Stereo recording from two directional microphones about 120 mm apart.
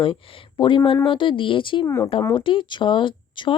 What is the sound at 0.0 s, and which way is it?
Speech, 45° left (ahead or behind).